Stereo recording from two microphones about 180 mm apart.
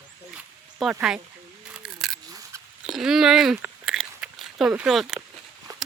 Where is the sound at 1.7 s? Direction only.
Centre (ahead or behind).